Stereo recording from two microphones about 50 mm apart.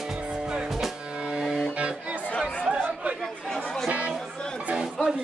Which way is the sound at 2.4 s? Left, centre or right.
Centre.